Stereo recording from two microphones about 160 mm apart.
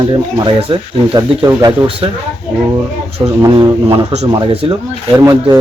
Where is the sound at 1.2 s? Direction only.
25° right (ahead or behind).